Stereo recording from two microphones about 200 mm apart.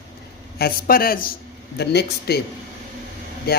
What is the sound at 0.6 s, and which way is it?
A man's voice, 50° left (ahead or behind).